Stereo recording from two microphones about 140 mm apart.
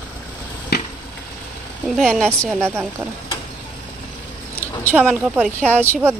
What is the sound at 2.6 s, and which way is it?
Speech, 15° right (ahead or behind).